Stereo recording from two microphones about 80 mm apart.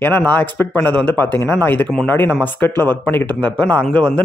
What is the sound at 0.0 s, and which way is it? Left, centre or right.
A man's voice, left.